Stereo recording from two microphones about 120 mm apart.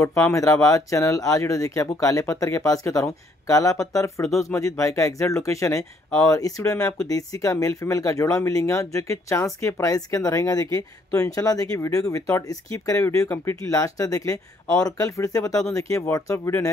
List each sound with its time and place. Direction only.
0.0 s speech: 20° left (ahead or behind)